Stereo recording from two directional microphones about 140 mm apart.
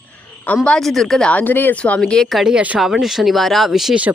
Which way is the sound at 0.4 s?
10° left (ahead or behind).